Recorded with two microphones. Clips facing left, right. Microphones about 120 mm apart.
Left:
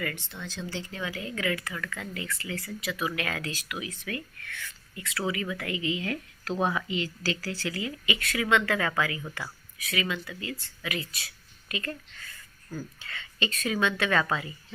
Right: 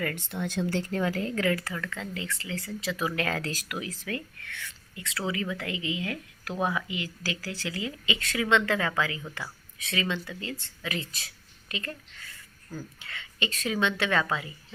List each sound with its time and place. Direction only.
0.0 s speech: 45° right (ahead or behind); by 6.5 s 20° right (ahead or behind)
6.5 s speech: 20° left (ahead or behind)
6.8 s speech: 15° right (ahead or behind)
12.7 s speech: 20° right (ahead or behind)